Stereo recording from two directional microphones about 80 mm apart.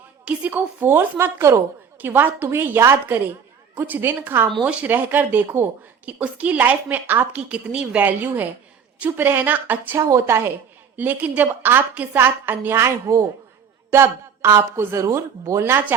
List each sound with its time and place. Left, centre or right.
0.3 s a woman's voice: right
1.4 s a man's voice: right
4.6 s a woman's voice: centre
10.0 s a man's voice: right
10.9 s a woman's voice: right